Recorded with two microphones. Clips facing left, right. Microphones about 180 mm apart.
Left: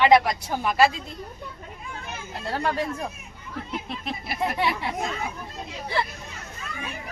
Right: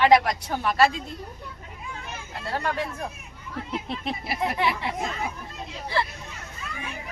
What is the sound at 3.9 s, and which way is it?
Speech, 30° right (ahead or behind).